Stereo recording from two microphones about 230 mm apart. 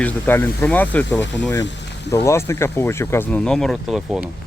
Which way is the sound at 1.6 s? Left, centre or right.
Left.